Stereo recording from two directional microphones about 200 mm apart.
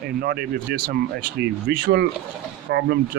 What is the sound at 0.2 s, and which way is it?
Speech, 50° right (ahead or behind).